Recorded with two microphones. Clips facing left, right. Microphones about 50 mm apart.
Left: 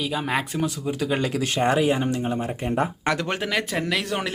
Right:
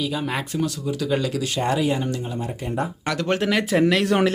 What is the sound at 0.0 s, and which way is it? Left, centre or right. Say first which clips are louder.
Speech: even; centre.